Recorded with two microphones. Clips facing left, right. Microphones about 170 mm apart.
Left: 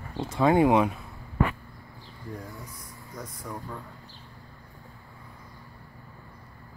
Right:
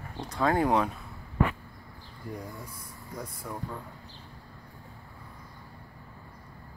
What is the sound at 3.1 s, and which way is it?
Speech, 10° right (ahead or behind).